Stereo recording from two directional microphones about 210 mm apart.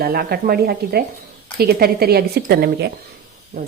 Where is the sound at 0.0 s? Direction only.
45° right (ahead or behind).